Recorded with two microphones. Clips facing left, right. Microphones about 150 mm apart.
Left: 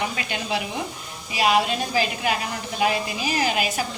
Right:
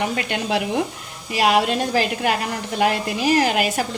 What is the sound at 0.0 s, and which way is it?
A woman's voice, 60° right (ahead or behind).